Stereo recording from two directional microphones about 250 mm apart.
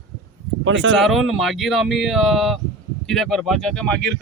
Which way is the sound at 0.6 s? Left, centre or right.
Right.